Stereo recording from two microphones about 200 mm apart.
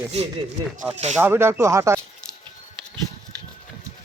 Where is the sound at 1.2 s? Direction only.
10° right (ahead or behind).